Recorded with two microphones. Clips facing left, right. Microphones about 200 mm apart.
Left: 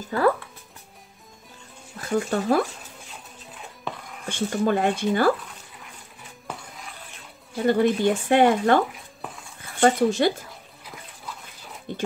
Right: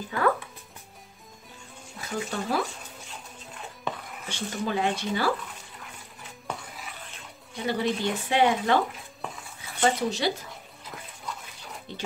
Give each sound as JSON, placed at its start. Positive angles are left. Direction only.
{"t": 2.1, "sound": "speech", "side_deg": 50}
{"t": 3.9, "sound": "music", "side_deg": 0}
{"t": 4.3, "sound": "speech", "side_deg": 50}
{"t": 6.4, "sound": "dog", "side_deg": 0}
{"t": 7.5, "sound": "speech", "side_deg": 50}
{"t": 9.2, "sound": "dog", "side_deg": 5}
{"t": 9.6, "sound": "speech", "side_deg": 50}
{"t": 10.5, "sound": "bathtub", "side_deg": 0}
{"t": 11.9, "sound": "a sound", "side_deg": 50}